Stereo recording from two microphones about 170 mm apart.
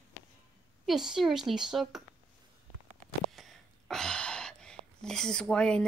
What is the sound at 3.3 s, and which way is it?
Speech, centre (ahead or behind).